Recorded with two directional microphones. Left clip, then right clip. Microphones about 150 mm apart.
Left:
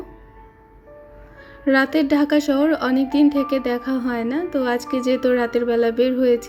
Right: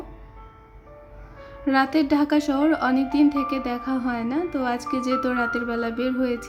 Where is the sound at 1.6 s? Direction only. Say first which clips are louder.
Left 3 dB; 15° left (ahead or behind).